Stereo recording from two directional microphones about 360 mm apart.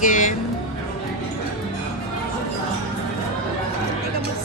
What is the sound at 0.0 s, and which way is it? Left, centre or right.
Music, left.